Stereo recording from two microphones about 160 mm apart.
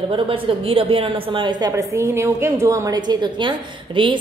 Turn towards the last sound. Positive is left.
turn(degrees=-30)  # may be behind; listen again after turning